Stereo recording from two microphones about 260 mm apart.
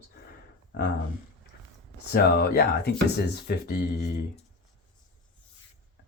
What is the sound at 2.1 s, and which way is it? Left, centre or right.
Speech, left.